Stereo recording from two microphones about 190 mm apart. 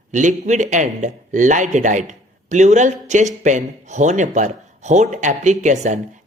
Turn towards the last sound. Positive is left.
turn(degrees=-40)  # may be behind; listen again after turning